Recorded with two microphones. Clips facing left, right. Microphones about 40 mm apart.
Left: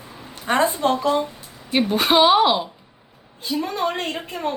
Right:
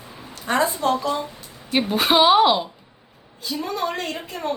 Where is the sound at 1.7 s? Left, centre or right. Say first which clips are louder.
Left 1 dB; centre.